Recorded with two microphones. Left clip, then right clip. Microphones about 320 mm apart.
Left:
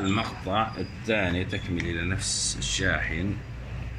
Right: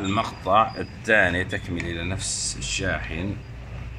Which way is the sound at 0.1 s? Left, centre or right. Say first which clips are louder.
Right 12 dB; centre.